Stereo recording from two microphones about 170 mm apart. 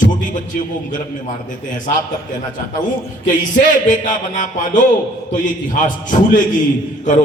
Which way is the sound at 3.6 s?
50° left (ahead or behind).